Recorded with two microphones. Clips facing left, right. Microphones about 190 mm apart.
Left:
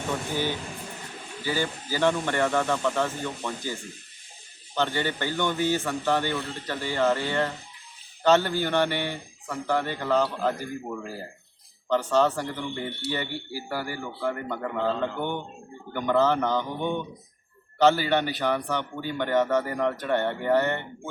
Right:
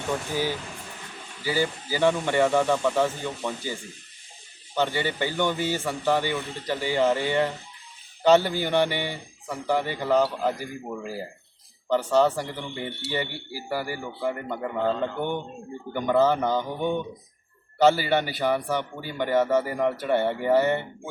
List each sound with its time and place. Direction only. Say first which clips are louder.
1.5 s a man's voice: right 2 dB; 10° right (ahead or behind)
15.9 s a man's voice: right 1 dB; 10° right (ahead or behind)